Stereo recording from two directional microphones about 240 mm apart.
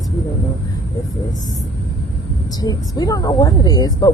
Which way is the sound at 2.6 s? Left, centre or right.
Centre.